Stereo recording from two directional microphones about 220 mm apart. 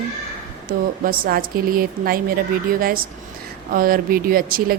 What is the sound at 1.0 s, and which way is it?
Speech, 40° right (ahead or behind).